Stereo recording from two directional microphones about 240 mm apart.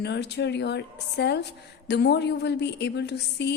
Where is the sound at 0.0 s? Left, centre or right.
Left.